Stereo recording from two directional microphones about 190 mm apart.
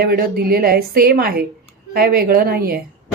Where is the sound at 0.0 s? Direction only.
55° right (ahead or behind).